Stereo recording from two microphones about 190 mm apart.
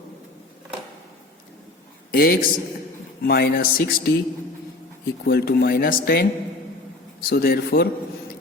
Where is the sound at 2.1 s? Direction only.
55° left (ahead or behind).